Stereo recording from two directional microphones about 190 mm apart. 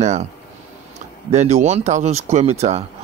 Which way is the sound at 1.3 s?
35° right (ahead or behind).